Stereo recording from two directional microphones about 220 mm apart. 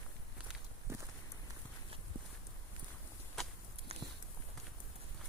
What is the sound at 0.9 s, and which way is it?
Walk, 10° right (ahead or behind).